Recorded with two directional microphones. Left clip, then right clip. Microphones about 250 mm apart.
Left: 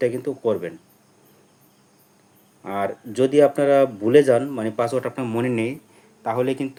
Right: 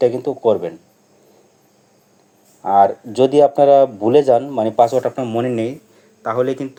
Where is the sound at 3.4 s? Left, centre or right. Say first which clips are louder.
Right 6 dB; left.